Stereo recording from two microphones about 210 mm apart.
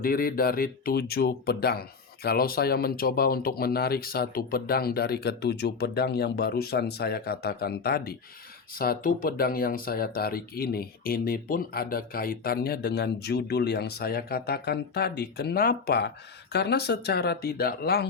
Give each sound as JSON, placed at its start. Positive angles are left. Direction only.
{"t": 0.0, "sound": "speech", "side_deg": 45}